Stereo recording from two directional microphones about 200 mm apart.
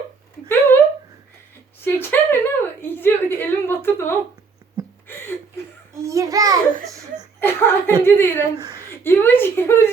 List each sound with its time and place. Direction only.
0.4 s a sound: 10° left (ahead or behind)
1.8 s a woman's voice: 10° left (ahead or behind)
5.0 s a sound: 10° left (ahead or behind)
5.9 s a child's voice: 15° right (ahead or behind)
7.3 s a woman's voice: 10° left (ahead or behind)
8.5 s speech: 20° right (ahead or behind)
8.9 s a woman's voice: 10° left (ahead or behind)